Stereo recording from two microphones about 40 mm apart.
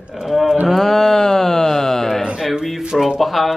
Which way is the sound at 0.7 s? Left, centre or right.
Centre.